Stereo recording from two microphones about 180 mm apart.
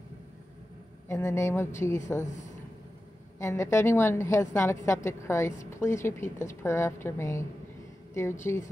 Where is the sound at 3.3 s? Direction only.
15° left (ahead or behind).